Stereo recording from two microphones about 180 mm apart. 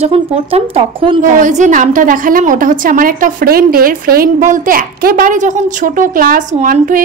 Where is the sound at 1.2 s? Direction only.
45° right (ahead or behind).